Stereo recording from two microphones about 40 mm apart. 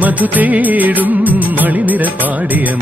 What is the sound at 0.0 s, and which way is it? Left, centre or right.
Music, right.